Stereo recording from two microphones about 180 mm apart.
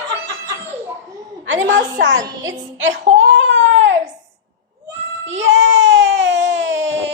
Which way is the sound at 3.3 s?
90° right.